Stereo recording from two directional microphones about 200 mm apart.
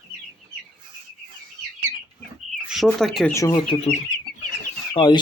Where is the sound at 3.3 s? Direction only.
15° left (ahead or behind).